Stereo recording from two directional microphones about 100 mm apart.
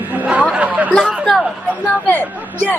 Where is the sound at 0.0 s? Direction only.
15° right (ahead or behind).